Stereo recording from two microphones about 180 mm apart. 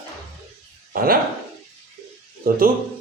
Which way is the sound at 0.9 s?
55° right (ahead or behind).